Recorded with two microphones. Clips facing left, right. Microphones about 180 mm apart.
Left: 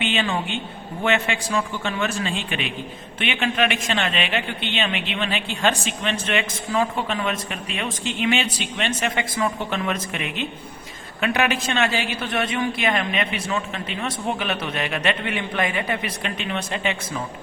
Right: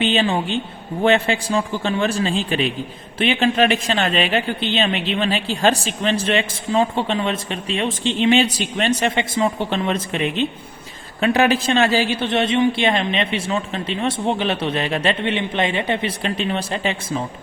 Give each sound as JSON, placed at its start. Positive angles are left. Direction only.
{"t": 0.0, "sound": "a woman's voice", "side_deg": -35}